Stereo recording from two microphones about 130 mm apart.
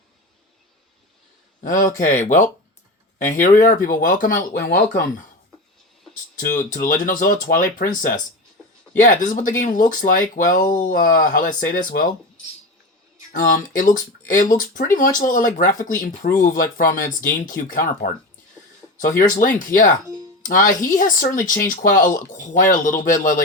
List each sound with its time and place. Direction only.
1.6 s speech: 90° left
2.2 s speech: 80° left
6.4 s speech: 90° left
9.0 s speech: 75° left (ahead or behind); by 12.0 s 90° left
13.3 s speech: 90° left
19.7 s speech: 20° left (ahead or behind)
20.4 s speech: 90° left